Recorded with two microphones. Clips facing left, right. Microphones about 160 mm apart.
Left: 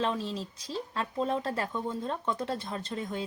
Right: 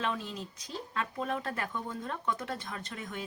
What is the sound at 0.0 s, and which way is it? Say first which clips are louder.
Speech: left 4 dB; 30° left (ahead or behind).